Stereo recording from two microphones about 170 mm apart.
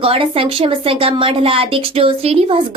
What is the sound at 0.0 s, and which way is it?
Speech, 35° right (ahead or behind).